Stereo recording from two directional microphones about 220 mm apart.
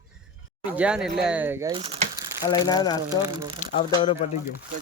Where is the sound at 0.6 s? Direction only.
5° right (ahead or behind).